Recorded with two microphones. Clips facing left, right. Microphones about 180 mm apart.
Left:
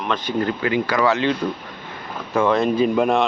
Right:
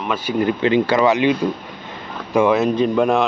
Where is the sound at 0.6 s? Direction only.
25° right (ahead or behind).